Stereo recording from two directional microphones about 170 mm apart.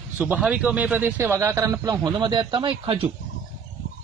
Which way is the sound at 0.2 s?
5° right (ahead or behind).